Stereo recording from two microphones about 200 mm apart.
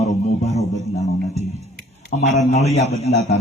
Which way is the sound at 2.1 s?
40° left (ahead or behind).